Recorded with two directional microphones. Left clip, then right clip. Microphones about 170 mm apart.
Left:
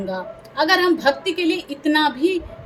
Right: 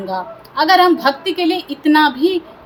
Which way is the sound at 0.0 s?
20° left (ahead or behind).